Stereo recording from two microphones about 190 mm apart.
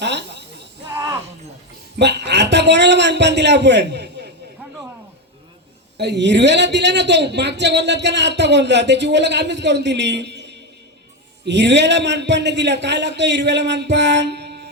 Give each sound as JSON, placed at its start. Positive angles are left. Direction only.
{"t": 0.0, "sound": "chuckle", "side_deg": -65}
{"t": 0.9, "sound": "a sound", "side_deg": -15}
{"t": 2.0, "sound": "a man's voice", "side_deg": -65}
{"t": 6.0, "sound": "a man's voice", "side_deg": -65}